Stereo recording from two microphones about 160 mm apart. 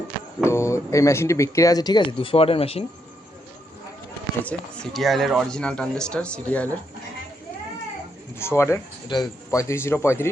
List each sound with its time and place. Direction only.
0.4 s speech: 15° left (ahead or behind); by 2.8 s 35° left (ahead or behind)
4.5 s speech: 5° left (ahead or behind)
8.4 s a man's voice: 15° left (ahead or behind)